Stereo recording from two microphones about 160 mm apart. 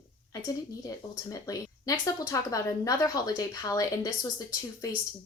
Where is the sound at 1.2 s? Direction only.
20° left (ahead or behind).